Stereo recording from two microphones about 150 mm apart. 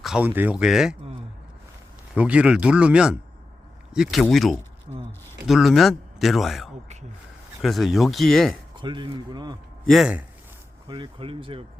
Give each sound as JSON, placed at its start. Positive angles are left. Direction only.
{"t": 0.0, "sound": "a sound", "side_deg": -5}
{"t": 0.3, "sound": "speech", "side_deg": -10}
{"t": 2.1, "sound": "speech", "side_deg": -10}
{"t": 4.9, "sound": "a sound", "side_deg": -45}
{"t": 5.5, "sound": "speech", "side_deg": 0}
{"t": 8.7, "sound": "speech", "side_deg": -30}
{"t": 9.8, "sound": "speech", "side_deg": 0}
{"t": 10.8, "sound": "speech", "side_deg": -35}